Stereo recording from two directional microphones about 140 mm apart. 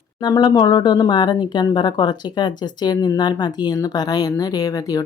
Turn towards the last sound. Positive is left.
turn(degrees=25)  # may be behind; listen again after turning